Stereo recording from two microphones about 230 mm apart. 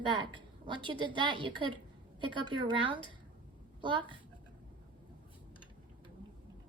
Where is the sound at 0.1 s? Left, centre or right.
Right.